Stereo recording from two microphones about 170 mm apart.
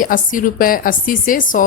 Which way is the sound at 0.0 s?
50° left (ahead or behind).